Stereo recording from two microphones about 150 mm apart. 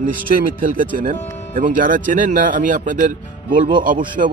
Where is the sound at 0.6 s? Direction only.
65° right (ahead or behind).